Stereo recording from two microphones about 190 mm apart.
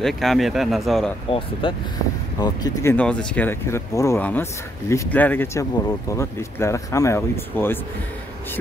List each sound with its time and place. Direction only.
0.0 s speech: centre (ahead or behind)
1.6 s speech: 25° left (ahead or behind); by 7.8 s 10° left (ahead or behind)